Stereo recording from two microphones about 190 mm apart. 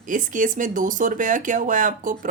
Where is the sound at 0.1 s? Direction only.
45° right (ahead or behind).